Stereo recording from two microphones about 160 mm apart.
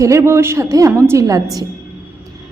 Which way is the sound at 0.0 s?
15° right (ahead or behind).